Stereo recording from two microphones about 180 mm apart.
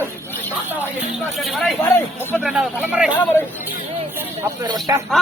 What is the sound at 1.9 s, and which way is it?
Speech, 10° left (ahead or behind).